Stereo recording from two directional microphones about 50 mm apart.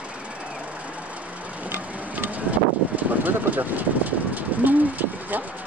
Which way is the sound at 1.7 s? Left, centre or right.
Right.